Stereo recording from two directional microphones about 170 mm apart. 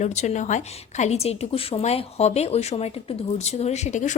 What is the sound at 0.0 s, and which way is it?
A woman's voice, 40° left (ahead or behind).